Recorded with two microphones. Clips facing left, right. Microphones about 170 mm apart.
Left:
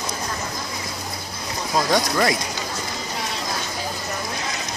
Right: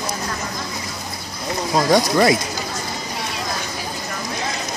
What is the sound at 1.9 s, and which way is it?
Speech, 15° right (ahead or behind).